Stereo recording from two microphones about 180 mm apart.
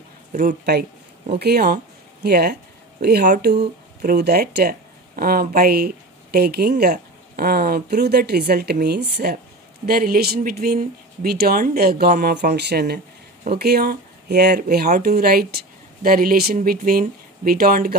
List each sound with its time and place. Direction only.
0.3 s speech: 45° right (ahead or behind)
1.4 s speech: 60° right (ahead or behind)